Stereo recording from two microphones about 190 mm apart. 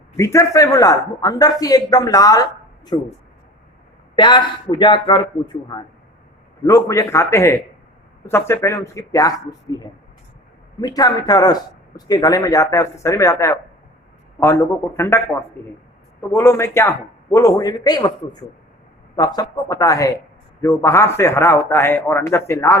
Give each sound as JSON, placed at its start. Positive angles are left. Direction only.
{"t": 0.2, "sound": "a man's voice", "side_deg": 15}
{"t": 4.1, "sound": "a man's voice", "side_deg": 25}
{"t": 6.7, "sound": "a man's voice", "side_deg": 15}